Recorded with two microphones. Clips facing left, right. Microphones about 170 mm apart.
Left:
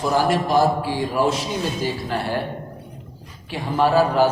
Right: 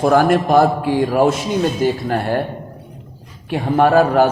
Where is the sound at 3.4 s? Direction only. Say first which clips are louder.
Right 5 dB; 55° right (ahead or behind).